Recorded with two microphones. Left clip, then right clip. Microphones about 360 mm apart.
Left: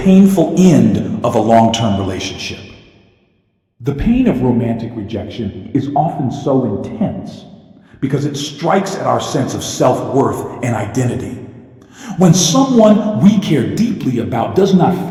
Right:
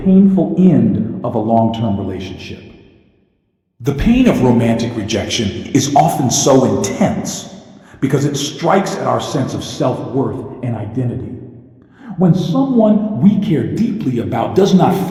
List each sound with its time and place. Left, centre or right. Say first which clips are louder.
0.0 s a man's voice: left 2 dB; left; by 2.6 s centre
3.8 s a man's voice: right 2 dB; centre; by 6.6 s right
7.0 s speech: right 5 dB; right
8.0 s a man's voice: right 2 dB; centre
10.2 s a man's voice: left 5 dB; left
11.0 s a man's voice: left 4 dB; left
13.2 s a man's voice: left 1 dB; centre